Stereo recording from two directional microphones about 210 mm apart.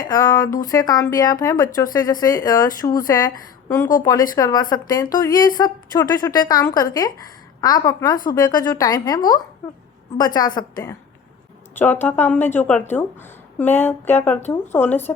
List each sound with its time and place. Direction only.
0.0 s a woman's voice: 20° left (ahead or behind)